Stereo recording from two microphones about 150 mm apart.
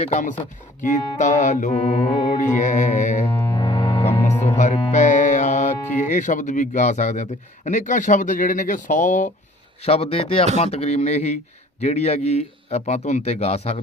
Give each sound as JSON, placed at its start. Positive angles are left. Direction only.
{"t": 0.0, "sound": "speech", "side_deg": 50}
{"t": 3.2, "sound": "music", "side_deg": 30}
{"t": 4.5, "sound": "speech", "side_deg": 50}
{"t": 9.8, "sound": "speech", "side_deg": 40}